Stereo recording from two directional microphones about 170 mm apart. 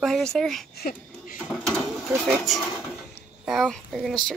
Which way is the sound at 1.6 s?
Centre (ahead or behind).